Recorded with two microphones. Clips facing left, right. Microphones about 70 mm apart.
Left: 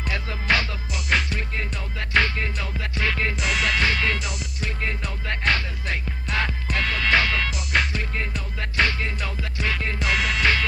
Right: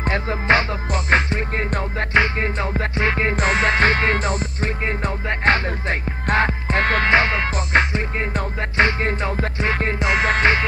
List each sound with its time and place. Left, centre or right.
0.0 s music: right
2.1 s music: right
7.1 s music: right
9.0 s music: right